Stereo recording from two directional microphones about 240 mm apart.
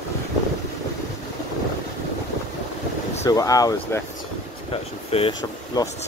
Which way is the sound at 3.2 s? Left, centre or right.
Centre.